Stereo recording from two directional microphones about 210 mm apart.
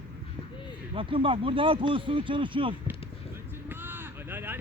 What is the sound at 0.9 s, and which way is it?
Speech, 25° right (ahead or behind).